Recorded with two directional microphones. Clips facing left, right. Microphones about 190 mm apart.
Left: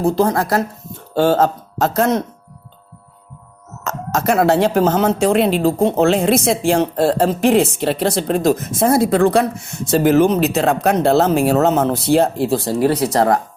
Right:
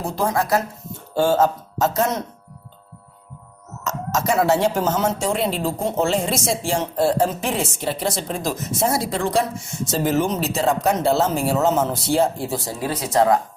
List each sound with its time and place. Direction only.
0.0 s speech: 60° left (ahead or behind)
3.8 s speech: 55° left (ahead or behind)